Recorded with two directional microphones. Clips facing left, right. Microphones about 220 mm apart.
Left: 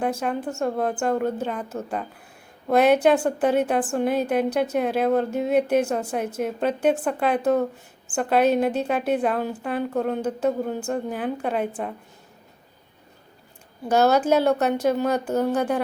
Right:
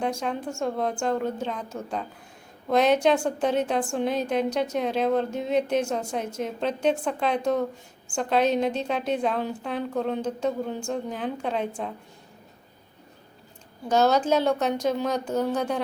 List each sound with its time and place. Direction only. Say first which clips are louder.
0.0 s a woman's voice: left 3 dB; 5° left (ahead or behind)
13.8 s a woman's voice: left 2 dB; 10° left (ahead or behind)